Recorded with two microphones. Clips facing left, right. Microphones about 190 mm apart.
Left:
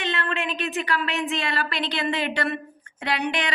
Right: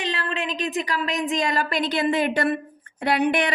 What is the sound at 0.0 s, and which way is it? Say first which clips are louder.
Female singing: even; 35° right (ahead or behind).